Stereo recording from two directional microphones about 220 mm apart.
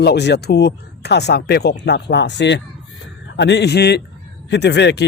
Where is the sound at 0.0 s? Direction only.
50° left (ahead or behind).